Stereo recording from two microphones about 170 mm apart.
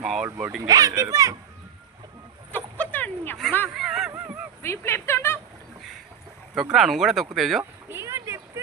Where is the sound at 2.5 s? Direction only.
10° left (ahead or behind).